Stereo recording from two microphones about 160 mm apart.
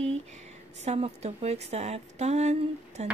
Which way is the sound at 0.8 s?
40° right (ahead or behind).